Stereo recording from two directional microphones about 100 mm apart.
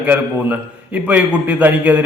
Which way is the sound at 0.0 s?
15° right (ahead or behind).